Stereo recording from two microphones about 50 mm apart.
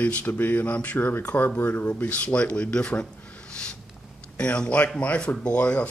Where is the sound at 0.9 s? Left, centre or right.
Left.